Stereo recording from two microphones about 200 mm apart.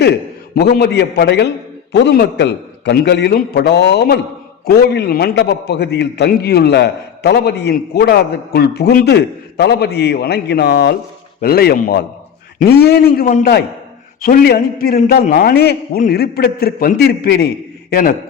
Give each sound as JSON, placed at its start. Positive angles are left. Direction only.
{"t": 0.0, "sound": "a man's voice", "side_deg": 55}